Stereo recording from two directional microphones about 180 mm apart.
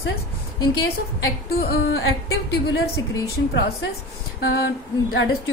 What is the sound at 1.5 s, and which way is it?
Speech, 55° left (ahead or behind).